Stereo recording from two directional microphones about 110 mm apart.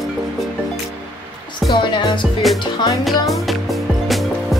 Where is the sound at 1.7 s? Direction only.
45° left (ahead or behind).